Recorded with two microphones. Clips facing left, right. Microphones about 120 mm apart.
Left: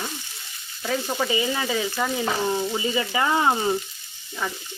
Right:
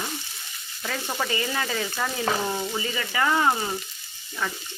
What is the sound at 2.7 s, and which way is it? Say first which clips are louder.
Speech: left 4 dB; 20° left (ahead or behind).